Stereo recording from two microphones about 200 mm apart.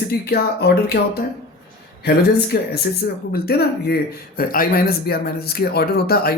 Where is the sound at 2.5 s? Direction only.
50° left (ahead or behind).